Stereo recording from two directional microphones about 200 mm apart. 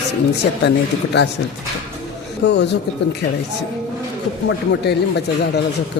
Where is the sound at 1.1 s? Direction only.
60° left (ahead or behind).